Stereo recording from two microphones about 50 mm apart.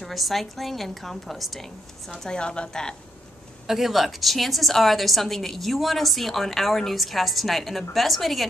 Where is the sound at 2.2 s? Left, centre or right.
Centre.